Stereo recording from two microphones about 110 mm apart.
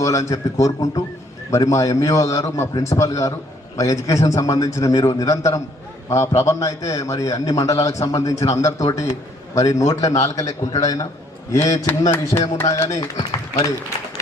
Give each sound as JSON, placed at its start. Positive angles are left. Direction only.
{"t": 0.0, "sound": "a man's voice", "side_deg": 30}
{"t": 9.6, "sound": "a man's voice", "side_deg": 30}
{"t": 12.3, "sound": "speech", "side_deg": 45}
{"t": 12.6, "sound": "a man's voice", "side_deg": 30}